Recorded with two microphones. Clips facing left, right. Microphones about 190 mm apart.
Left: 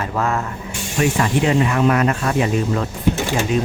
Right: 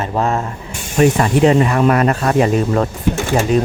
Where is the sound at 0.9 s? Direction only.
40° right (ahead or behind).